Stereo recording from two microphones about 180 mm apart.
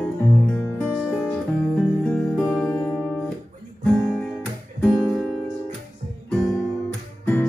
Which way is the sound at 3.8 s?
5° left (ahead or behind).